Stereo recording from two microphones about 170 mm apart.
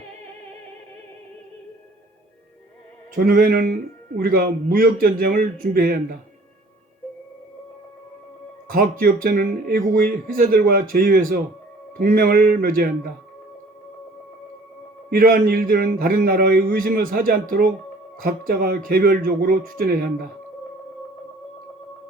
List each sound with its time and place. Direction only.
3.2 s a man's voice: 60° right (ahead or behind)
8.7 s a man's voice: 55° right (ahead or behind)
15.1 s a man's voice: 55° right (ahead or behind)